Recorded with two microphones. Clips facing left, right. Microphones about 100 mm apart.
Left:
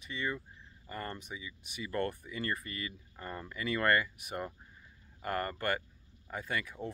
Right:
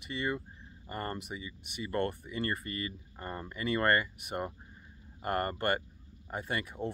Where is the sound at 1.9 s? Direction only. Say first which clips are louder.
Right 2 dB; 30° right (ahead or behind).